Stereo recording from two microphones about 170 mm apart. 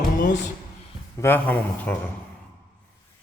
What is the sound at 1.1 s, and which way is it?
Speech, 15° left (ahead or behind).